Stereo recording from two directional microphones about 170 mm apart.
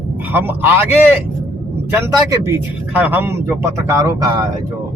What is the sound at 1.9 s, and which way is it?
Speech, 15° right (ahead or behind).